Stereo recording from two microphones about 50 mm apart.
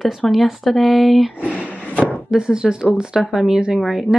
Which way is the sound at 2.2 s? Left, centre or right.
Centre.